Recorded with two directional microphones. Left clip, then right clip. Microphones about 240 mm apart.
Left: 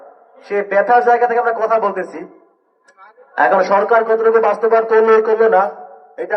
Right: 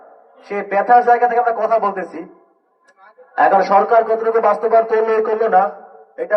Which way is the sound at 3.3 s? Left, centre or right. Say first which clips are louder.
Even; left.